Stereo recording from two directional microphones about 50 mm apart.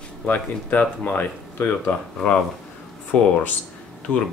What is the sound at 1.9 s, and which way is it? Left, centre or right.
Speech, left.